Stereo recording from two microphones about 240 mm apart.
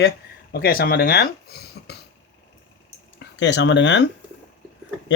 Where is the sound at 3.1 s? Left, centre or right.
Left.